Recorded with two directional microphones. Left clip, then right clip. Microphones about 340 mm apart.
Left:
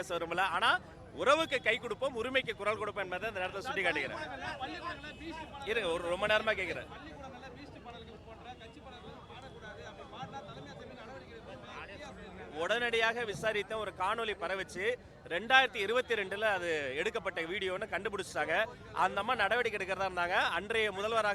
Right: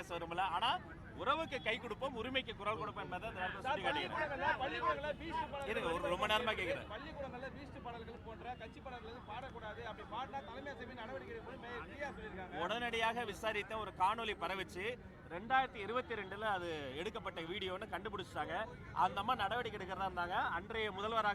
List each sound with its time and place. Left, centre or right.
0.0 s speech: centre
1.2 s speech: centre
1.5 s speech: centre
5.6 s speech: centre
12.5 s speech: centre
15.3 s speech: centre